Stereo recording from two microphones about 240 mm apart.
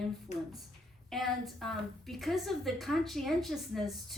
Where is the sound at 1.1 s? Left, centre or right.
Centre.